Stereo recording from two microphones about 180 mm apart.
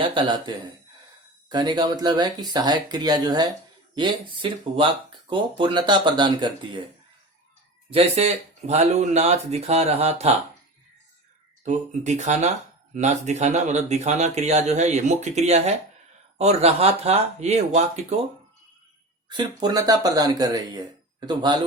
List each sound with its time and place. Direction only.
0.0 s speech: 25° right (ahead or behind)
7.9 s speech: 35° right (ahead or behind)
11.6 s speech: 40° right (ahead or behind)
19.3 s speech: 25° right (ahead or behind)